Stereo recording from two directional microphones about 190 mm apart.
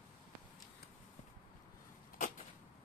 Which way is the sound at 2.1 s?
45° left (ahead or behind).